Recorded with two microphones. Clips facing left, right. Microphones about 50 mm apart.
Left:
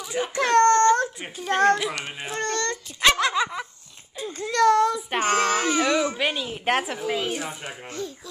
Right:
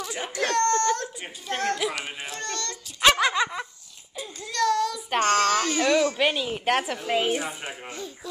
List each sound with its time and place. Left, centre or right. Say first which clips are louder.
0.4 s a sound: left 6 dB; left
1.5 s a child's voice: left 8 dB; left
1.8 s speech: even; centre
2.3 s a child's voice: left 10 dB; left
3.0 s speech: even; centre
4.4 s a child's voice: left 5 dB; left
5.1 s speech: right 6 dB; centre
6.1 s speech: right 2 dB; centre
7.2 s speech: right 3 dB; centre